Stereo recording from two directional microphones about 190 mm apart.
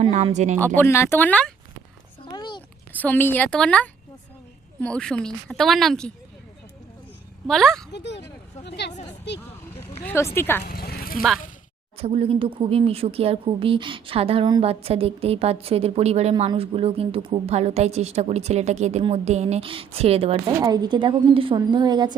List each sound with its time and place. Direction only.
0.0 s speech: 35° right (ahead or behind)
0.8 s a woman's voice: 15° left (ahead or behind)
2.3 s a sound: 25° left (ahead or behind)
3.0 s a woman's voice: 10° left (ahead or behind)
7.4 s a woman's voice: centre (ahead or behind)
7.9 s speech: 65° left (ahead or behind)
10.0 s a woman's voice: 10° left (ahead or behind)
10.6 s speech: 55° left (ahead or behind)
11.9 s speech: 30° right (ahead or behind)
20.6 s a woman's voice: 20° right (ahead or behind)